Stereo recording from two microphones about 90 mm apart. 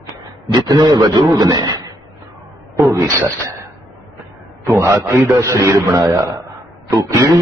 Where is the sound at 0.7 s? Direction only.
40° right (ahead or behind).